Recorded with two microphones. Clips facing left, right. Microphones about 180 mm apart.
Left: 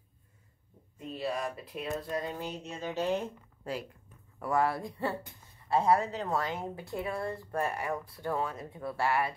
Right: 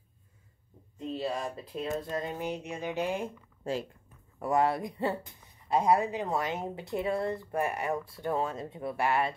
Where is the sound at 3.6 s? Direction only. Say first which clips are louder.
Right 4 dB; 25° right (ahead or behind).